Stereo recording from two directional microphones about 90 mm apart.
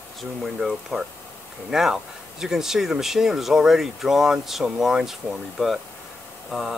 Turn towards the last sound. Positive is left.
turn(degrees=0)  # may be behind; listen again after turning